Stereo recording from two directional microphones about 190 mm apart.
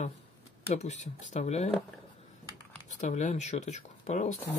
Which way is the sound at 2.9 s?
40° left (ahead or behind).